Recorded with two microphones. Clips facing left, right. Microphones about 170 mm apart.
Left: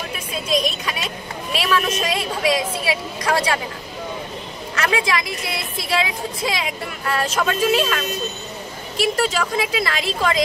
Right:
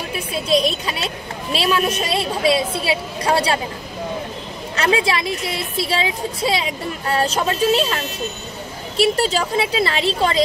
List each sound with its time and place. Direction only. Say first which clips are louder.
0.5 s a woman's voice: right 3 dB; 30° right (ahead or behind)
4.7 s a woman's voice: right 3 dB; 30° right (ahead or behind)